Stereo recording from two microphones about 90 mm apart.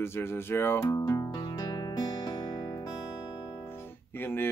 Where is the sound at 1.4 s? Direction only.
50° left (ahead or behind).